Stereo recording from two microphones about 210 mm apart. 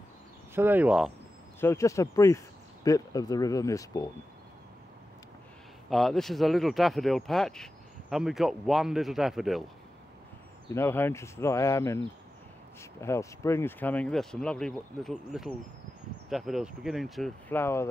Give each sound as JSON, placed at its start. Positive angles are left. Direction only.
{"t": 0.6, "sound": "speech", "side_deg": -10}
{"t": 1.6, "sound": "speech", "side_deg": 15}
{"t": 5.9, "sound": "speech", "side_deg": 0}
{"t": 10.7, "sound": "speech", "side_deg": 10}
{"t": 13.0, "sound": "speech", "side_deg": 15}